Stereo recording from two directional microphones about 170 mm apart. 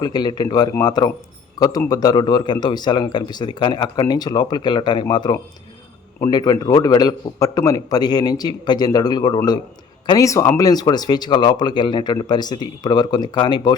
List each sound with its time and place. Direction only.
0.0 s speech: 25° left (ahead or behind)